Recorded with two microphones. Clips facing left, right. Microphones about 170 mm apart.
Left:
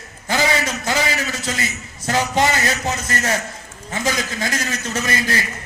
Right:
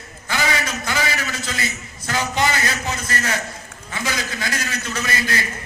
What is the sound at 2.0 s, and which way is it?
A man's voice, 35° left (ahead or behind).